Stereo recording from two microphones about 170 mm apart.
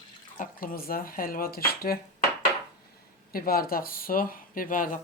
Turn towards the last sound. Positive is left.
turn(degrees=55)  # may be behind; listen again after turning